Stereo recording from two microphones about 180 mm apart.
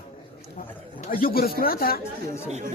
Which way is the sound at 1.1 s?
55° left (ahead or behind).